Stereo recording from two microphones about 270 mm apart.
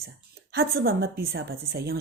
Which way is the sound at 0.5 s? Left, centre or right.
Right.